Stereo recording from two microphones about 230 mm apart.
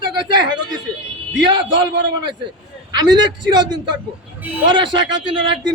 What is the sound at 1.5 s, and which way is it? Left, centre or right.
Speech, centre.